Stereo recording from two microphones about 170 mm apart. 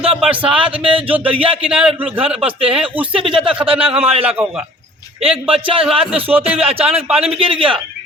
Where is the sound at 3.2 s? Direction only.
30° right (ahead or behind).